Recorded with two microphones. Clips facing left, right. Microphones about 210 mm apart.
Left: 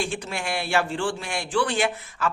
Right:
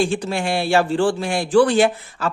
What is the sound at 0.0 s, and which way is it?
A woman's voice, 35° right (ahead or behind).